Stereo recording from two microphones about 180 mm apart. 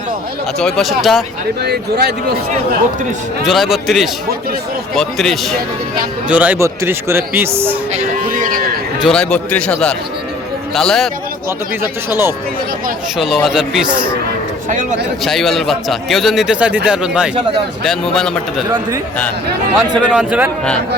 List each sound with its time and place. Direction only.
0.6 s a man's voice: centre (ahead or behind)
1.6 s speech: 65° right (ahead or behind)
3.4 s a man's voice: centre (ahead or behind)
7.9 s livestock: 50° right (ahead or behind)
9.0 s a man's voice: 5° left (ahead or behind)
10.8 s a man's voice: centre (ahead or behind)
11.8 s speech: 15° right (ahead or behind)
13.1 s a man's voice: centre (ahead or behind)
13.8 s speech: 25° right (ahead or behind)
14.7 s speech: 45° right (ahead or behind)
15.2 s a man's voice: centre (ahead or behind)
20.1 s speech: 5° right (ahead or behind)